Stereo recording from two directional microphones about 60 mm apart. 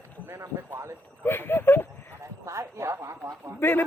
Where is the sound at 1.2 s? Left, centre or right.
Left.